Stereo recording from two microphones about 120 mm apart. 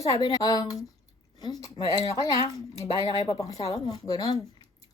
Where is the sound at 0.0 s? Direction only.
35° left (ahead or behind).